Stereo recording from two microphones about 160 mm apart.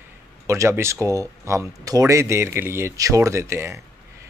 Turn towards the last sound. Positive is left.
turn(degrees=-15)  # may be behind; listen again after turning